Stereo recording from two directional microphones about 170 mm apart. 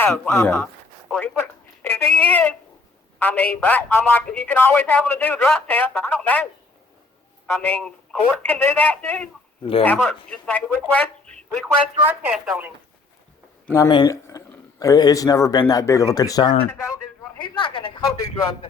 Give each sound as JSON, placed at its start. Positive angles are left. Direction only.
{"t": 0.0, "sound": "a man's voice", "side_deg": 15}
{"t": 7.5, "sound": "a man's voice", "side_deg": 5}
{"t": 12.0, "sound": "speech", "side_deg": -10}
{"t": 13.7, "sound": "a man's voice", "side_deg": 25}